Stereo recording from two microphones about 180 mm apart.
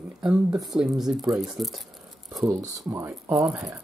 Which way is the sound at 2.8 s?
15° right (ahead or behind).